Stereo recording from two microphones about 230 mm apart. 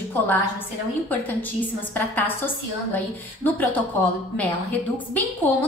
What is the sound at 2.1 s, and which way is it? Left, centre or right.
A woman's voice, centre.